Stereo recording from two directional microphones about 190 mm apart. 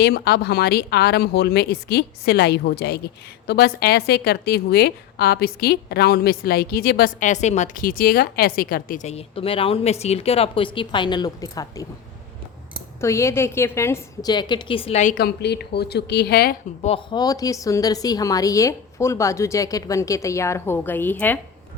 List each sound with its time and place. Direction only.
0.0 s a woman's voice: 60° left (ahead or behind); by 11.9 s 20° left (ahead or behind)
13.0 s a woman's voice: 15° left (ahead or behind); by 15.1 s 35° left (ahead or behind)
15.1 s speech: 60° left (ahead or behind)
16.8 s a woman's voice: 25° left (ahead or behind); by 21.3 s 10° left (ahead or behind)